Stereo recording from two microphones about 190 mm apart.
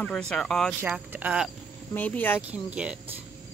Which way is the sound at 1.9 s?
10° left (ahead or behind).